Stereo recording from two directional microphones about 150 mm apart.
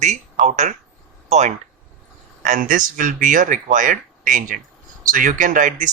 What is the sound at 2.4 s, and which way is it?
A man's voice, 60° right (ahead or behind).